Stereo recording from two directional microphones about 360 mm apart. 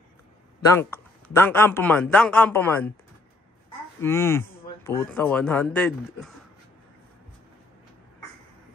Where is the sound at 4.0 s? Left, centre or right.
Centre.